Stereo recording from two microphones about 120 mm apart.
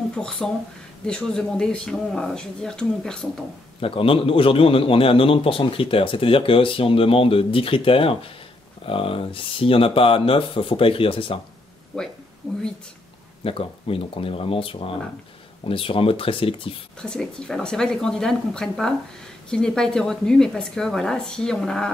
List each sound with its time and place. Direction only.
0.1 s speech: 10° left (ahead or behind)
3.8 s a man's voice: 50° left (ahead or behind)
13.4 s a man's voice: 50° left (ahead or behind)
17.0 s speech: 5° left (ahead or behind)